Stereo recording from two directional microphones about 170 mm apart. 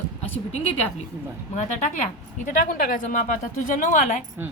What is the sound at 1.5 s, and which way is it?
A woman's voice, 45° left (ahead or behind).